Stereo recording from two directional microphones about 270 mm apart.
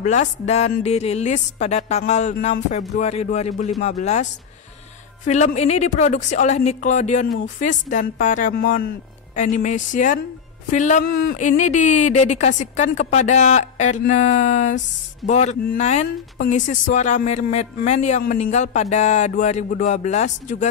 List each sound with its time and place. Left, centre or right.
0.0 s a woman's voice: left